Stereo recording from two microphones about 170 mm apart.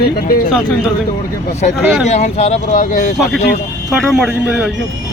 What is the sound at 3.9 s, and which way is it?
Speech, centre (ahead or behind).